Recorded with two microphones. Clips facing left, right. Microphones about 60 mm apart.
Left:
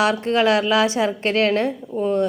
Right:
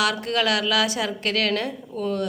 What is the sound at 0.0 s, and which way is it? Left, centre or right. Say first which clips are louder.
A woman's voice: left 5 dB; left.